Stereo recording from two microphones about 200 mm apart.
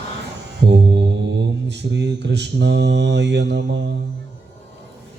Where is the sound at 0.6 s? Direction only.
60° right (ahead or behind).